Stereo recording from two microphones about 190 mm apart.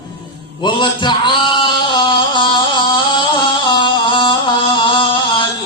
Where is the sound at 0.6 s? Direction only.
25° left (ahead or behind).